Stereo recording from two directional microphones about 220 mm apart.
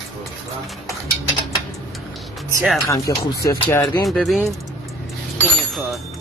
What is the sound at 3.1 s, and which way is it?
Speech, 15° left (ahead or behind).